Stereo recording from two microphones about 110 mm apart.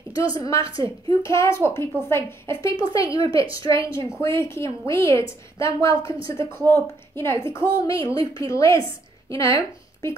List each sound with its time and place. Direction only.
0.1 s a woman's voice: 35° left (ahead or behind)
7.7 s speech: 35° left (ahead or behind)